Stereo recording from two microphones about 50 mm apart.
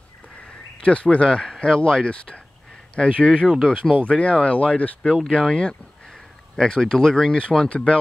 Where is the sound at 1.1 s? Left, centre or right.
Centre.